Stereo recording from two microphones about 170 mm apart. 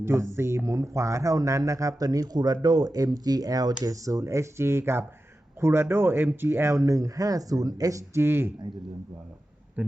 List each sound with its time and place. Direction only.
0.0 s speech: 15° right (ahead or behind)